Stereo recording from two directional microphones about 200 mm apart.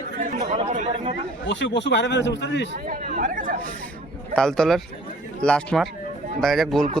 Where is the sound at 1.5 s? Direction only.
65° left (ahead or behind).